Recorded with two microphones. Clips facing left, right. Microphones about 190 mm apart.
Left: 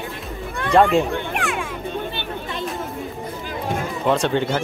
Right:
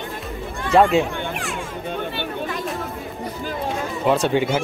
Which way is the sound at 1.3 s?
65° left (ahead or behind).